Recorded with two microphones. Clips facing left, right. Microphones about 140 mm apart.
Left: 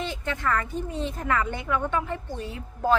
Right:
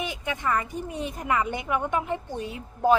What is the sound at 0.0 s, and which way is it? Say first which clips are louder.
A woman's voice: left 1 dB; 15° right (ahead or behind).